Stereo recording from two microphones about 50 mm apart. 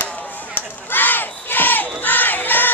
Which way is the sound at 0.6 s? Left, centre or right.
Left.